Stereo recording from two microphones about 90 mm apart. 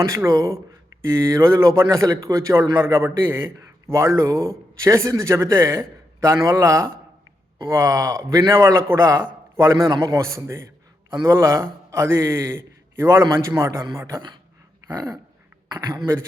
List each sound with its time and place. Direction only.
0.0 s a man's voice: 35° right (ahead or behind)
14.9 s speech: 45° right (ahead or behind)